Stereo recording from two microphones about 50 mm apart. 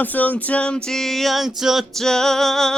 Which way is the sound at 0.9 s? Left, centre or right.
Centre.